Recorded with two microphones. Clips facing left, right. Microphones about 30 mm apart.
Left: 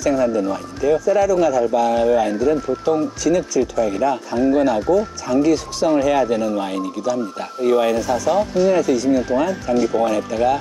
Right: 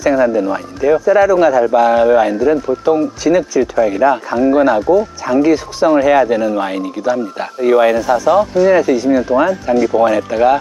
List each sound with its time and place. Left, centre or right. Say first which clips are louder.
0.0 s speech: right 5 dB; right